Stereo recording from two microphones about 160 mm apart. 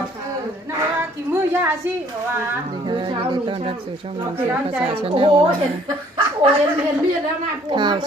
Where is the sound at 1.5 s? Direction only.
15° right (ahead or behind).